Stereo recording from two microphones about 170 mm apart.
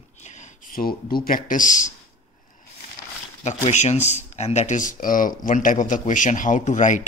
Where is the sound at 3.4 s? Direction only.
40° left (ahead or behind).